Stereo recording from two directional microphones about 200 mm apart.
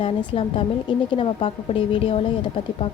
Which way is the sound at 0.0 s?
25° left (ahead or behind).